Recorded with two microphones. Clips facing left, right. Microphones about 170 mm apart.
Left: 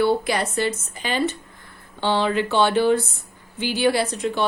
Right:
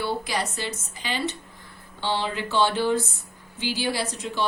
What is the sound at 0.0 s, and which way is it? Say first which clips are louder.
A woman's voice: left 7 dB; 55° left (ahead or behind).